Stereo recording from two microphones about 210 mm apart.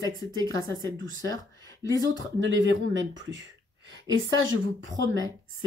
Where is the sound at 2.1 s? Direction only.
60° right (ahead or behind).